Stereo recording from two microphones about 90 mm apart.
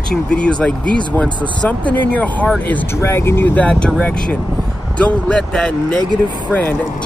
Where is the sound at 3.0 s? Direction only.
30° left (ahead or behind).